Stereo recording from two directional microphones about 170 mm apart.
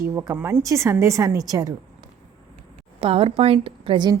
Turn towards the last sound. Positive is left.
turn(degrees=-25)  # may be behind; listen again after turning